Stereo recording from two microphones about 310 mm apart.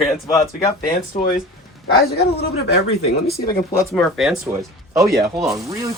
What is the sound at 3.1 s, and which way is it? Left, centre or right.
Speech, left.